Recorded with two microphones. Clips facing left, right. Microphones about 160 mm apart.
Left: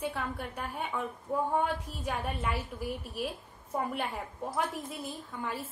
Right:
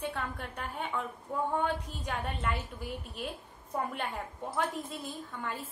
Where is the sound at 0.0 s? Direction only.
5° left (ahead or behind).